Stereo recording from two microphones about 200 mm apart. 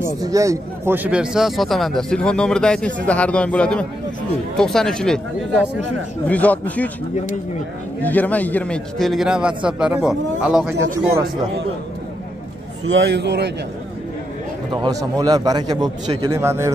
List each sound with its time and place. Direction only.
0.0 s speech: 15° right (ahead or behind); by 5.2 s 5° left (ahead or behind)
6.2 s speech: 5° left (ahead or behind)
8.0 s speech: 10° left (ahead or behind)
12.8 s a man's voice: 65° right (ahead or behind)
14.7 s a man's voice: 20° right (ahead or behind)